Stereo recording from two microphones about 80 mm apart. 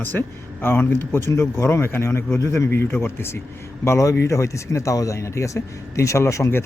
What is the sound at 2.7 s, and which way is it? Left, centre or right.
Speech, left.